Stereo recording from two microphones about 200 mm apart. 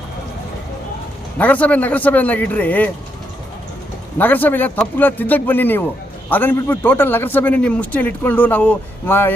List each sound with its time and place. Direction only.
1.4 s a man's voice: 5° left (ahead or behind)
4.2 s a man's voice: 10° left (ahead or behind)